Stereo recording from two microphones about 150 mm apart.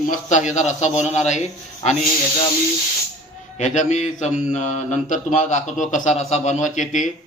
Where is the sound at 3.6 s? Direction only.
50° left (ahead or behind).